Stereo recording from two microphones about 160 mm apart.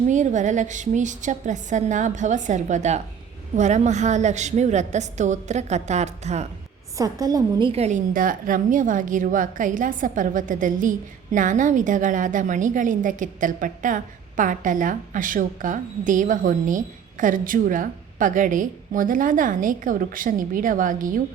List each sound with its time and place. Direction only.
0.1 s a woman's voice: 50° right (ahead or behind)
6.9 s a woman's voice: 20° right (ahead or behind)
7.7 s a woman's voice: 45° right (ahead or behind)